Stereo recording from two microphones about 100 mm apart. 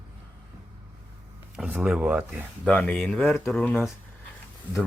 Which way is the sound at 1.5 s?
5° right (ahead or behind).